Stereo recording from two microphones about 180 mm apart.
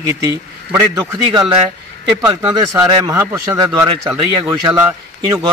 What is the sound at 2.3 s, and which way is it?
A man's voice, 20° right (ahead or behind).